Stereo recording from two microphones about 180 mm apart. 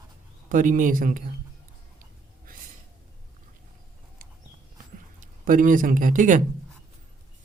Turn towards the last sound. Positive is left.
turn(degrees=-45)  # may be behind; listen again after turning